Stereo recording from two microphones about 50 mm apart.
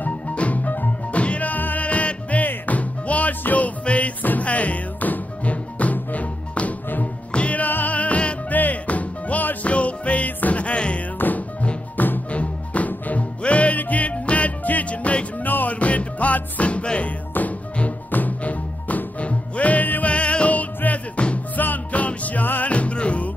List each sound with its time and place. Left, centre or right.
0.0 s music: left
11.1 s music: left